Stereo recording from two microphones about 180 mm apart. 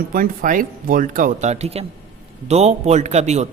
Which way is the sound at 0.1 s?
50° right (ahead or behind).